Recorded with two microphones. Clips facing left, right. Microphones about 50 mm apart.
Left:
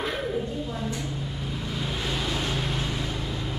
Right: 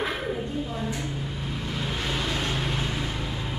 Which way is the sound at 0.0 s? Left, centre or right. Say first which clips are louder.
Even; centre.